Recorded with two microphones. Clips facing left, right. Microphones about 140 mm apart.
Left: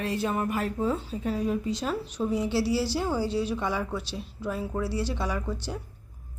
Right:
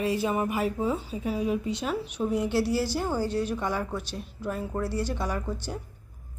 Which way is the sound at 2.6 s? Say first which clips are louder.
Even; 50° right (ahead or behind).